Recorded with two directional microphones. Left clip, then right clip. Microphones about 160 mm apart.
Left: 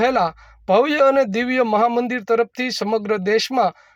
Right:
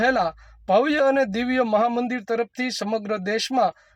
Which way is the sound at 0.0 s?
20° left (ahead or behind).